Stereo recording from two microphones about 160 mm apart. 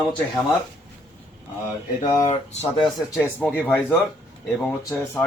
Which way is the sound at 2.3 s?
45° left (ahead or behind).